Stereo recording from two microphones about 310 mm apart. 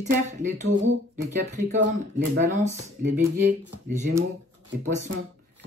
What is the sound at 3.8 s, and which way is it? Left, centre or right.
Speech, right.